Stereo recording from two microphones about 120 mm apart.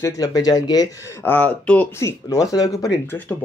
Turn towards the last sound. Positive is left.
turn(degrees=25)  # may be behind; listen again after turning